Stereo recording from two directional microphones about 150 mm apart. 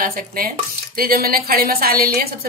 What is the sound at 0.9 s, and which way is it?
A woman's voice, 85° right.